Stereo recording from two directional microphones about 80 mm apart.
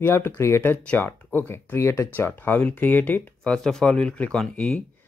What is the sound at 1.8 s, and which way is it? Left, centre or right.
Speech, left.